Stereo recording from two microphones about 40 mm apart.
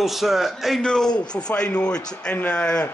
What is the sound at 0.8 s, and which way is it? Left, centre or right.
A man's voice, centre.